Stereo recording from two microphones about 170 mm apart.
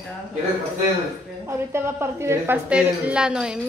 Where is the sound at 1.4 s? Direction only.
15° right (ahead or behind).